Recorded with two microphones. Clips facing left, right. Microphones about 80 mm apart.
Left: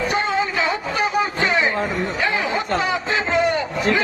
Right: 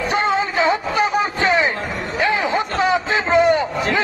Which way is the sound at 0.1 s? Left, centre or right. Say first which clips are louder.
Right 2 dB; right.